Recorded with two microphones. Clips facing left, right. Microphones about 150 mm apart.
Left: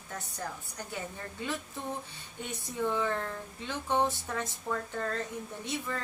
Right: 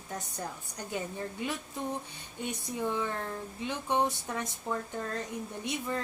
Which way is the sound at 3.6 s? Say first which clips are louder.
Even; 15° right (ahead or behind).